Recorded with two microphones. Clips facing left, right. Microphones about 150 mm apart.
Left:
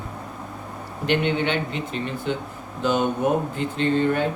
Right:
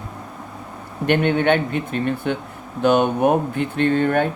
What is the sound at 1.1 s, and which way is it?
Speech, 55° right (ahead or behind).